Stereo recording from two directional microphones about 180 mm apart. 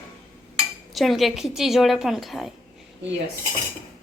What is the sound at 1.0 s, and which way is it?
A woman's voice, centre (ahead or behind).